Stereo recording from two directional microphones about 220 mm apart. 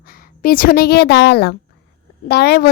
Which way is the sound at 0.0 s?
40° left (ahead or behind).